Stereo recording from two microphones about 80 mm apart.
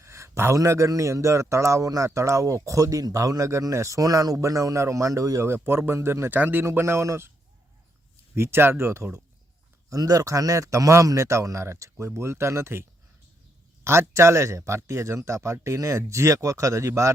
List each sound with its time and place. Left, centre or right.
0.0 s a sound: right
0.5 s speech: right
5.5 s speech: right
8.4 s speech: right
9.9 s speech: right
13.8 s speech: right